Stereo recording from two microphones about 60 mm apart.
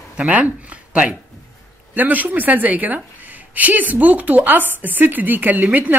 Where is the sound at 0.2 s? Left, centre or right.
Right.